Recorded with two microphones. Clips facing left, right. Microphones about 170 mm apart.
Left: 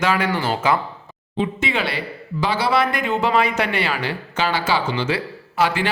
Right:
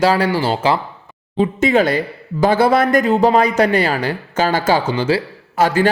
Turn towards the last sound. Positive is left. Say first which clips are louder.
# right 6 dB
turn(degrees=-45)  # may be behind; listen again after turning